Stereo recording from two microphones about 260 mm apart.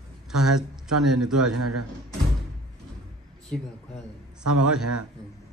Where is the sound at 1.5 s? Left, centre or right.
Right.